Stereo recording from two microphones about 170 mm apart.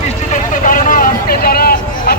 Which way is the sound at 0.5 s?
50° left (ahead or behind).